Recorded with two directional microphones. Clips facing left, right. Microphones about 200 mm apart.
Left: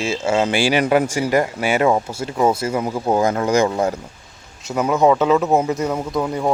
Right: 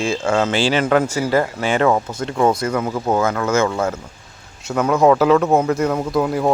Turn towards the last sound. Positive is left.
turn(degrees=-5)  # may be behind; listen again after turning